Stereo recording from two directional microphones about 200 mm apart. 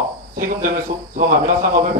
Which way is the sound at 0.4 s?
40° right (ahead or behind).